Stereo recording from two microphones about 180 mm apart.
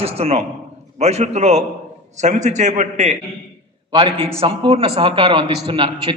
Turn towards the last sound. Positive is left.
turn(degrees=-30)  # may be behind; listen again after turning